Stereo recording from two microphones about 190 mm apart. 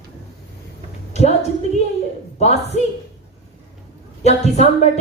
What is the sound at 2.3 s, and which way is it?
Speech, 35° left (ahead or behind).